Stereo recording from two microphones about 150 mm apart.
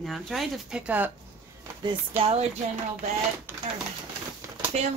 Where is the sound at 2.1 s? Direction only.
40° right (ahead or behind).